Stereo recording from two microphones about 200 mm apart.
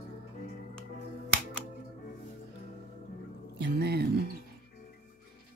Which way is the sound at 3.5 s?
55° right (ahead or behind).